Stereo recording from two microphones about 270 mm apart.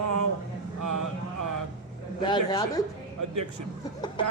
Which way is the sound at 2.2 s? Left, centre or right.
Centre.